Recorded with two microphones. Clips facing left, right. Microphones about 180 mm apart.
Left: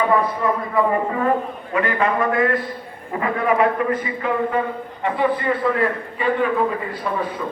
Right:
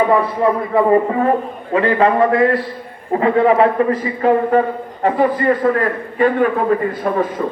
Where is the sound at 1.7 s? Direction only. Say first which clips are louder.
Right 6 dB; 30° right (ahead or behind); by 7.3 s 50° right (ahead or behind).